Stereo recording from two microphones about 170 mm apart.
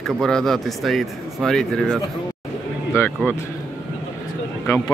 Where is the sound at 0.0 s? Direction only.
5° left (ahead or behind).